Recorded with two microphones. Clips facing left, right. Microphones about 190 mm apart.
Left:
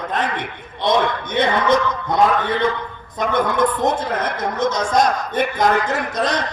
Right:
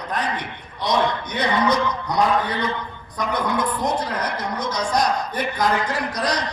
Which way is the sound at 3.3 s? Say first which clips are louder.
Left 5 dB; 25° left (ahead or behind).